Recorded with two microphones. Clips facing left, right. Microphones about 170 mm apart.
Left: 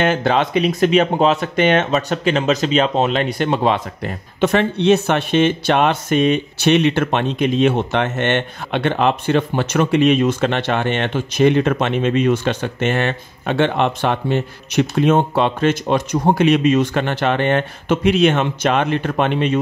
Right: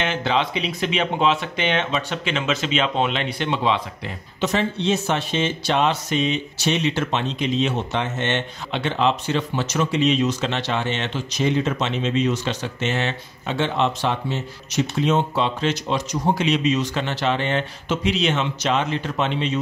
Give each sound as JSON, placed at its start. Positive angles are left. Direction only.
{"t": 0.0, "sound": "speech", "side_deg": 45}